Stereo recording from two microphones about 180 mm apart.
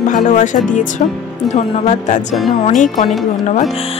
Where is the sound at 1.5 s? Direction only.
40° left (ahead or behind).